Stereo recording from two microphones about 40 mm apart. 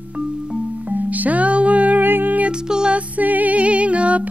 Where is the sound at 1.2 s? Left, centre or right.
Right.